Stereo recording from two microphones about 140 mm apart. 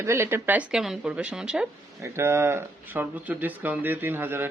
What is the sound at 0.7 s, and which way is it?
Speech, 5° right (ahead or behind).